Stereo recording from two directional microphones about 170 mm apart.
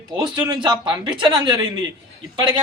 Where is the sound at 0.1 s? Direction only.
25° right (ahead or behind).